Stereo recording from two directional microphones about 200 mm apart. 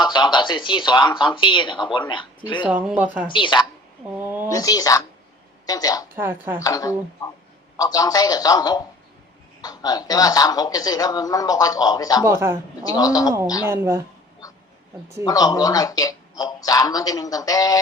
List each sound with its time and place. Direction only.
0.0 s speech: 20° left (ahead or behind)
2.6 s speech: 5° right (ahead or behind)
3.2 s speech: 25° left (ahead or behind)
4.1 s a sound: 10° right (ahead or behind)
4.5 s speech: 20° left (ahead or behind)
6.1 s speech: 10° right (ahead or behind)
6.6 s speech: 20° left (ahead or behind)
12.2 s speech: 10° right (ahead or behind)
12.8 s speech: 20° left (ahead or behind)
13.7 s speech: 10° right (ahead or behind)
15.2 s speech: 20° left (ahead or behind)